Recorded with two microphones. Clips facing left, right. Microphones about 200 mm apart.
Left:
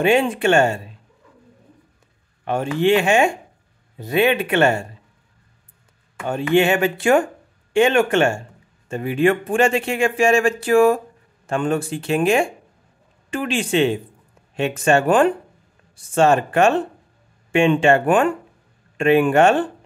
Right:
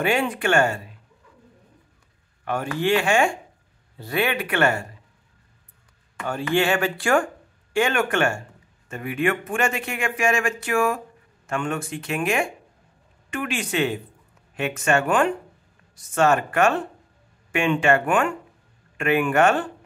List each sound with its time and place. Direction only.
0.0 s speech: 25° left (ahead or behind)
2.4 s speech: 25° left (ahead or behind)
6.2 s speech: 20° left (ahead or behind)